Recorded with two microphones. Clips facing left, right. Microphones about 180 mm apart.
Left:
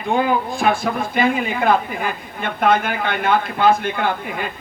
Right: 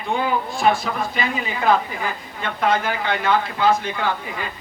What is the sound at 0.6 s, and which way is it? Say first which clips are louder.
A man's voice: left 1 dB; 55° left (ahead or behind).